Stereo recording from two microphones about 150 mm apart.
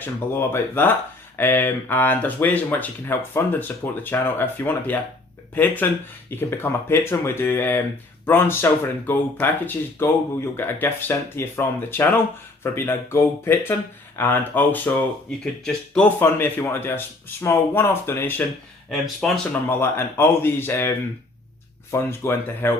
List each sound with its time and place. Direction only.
0.0 s speech: 15° left (ahead or behind)
18.9 s speech: centre (ahead or behind)
19.7 s speech: 15° left (ahead or behind)
21.9 s speech: 15° left (ahead or behind)